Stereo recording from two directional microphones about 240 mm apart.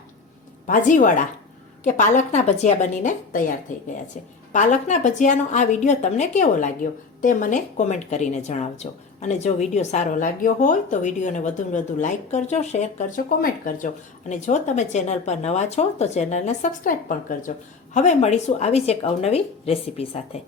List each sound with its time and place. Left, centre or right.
0.7 s a woman's voice: left
4.5 s a woman's voice: left